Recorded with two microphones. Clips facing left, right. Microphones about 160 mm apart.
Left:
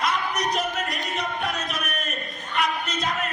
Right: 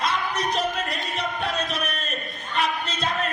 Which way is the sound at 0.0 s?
30° right (ahead or behind).